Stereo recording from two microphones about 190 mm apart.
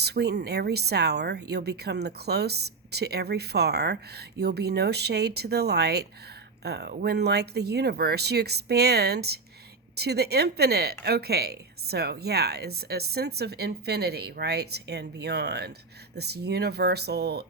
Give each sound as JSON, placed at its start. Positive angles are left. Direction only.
{"t": 0.0, "sound": "speech", "side_deg": -60}